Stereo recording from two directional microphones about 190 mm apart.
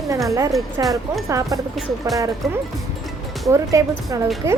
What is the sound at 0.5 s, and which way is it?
Speech, centre (ahead or behind).